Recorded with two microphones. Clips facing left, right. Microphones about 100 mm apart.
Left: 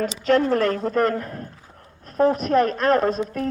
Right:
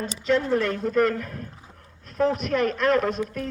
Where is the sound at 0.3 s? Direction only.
55° left (ahead or behind).